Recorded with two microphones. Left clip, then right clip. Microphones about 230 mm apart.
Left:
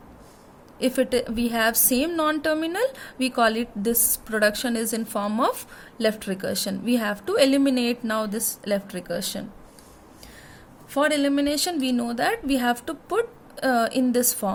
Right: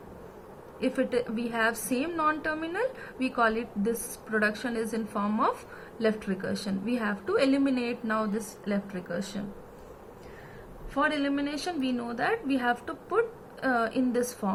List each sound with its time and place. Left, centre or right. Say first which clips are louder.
0.8 s a woman's voice: left 5 dB; left
10.9 s a woman's voice: left 6 dB; left